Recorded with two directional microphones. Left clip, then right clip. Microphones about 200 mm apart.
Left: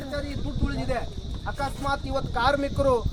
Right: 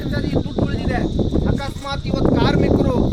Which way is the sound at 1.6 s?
55° left (ahead or behind).